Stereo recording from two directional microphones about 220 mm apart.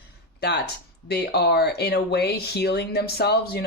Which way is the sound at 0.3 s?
45° left (ahead or behind).